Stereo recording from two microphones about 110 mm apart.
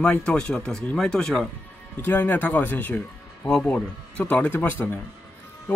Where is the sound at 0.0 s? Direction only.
10° left (ahead or behind).